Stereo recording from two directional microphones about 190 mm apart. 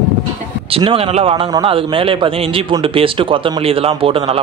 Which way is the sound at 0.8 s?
30° right (ahead or behind).